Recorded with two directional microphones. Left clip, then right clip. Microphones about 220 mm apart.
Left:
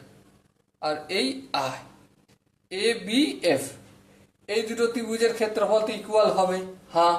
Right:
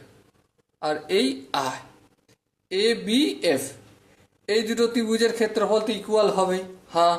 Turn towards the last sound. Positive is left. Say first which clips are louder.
# right 1 dB
turn(degrees=-25)  # may be behind; listen again after turning